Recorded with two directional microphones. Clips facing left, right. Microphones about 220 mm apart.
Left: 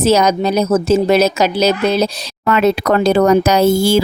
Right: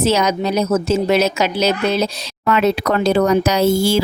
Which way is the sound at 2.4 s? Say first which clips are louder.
Left 2 dB; 50° left (ahead or behind).